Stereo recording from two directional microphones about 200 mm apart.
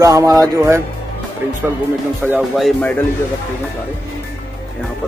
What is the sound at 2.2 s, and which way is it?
Speech, 5° right (ahead or behind).